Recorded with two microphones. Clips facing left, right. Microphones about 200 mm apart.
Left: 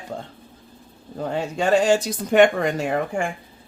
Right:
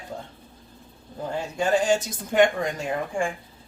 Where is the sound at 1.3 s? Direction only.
70° left (ahead or behind).